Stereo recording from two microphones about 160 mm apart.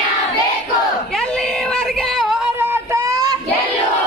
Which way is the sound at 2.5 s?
15° right (ahead or behind).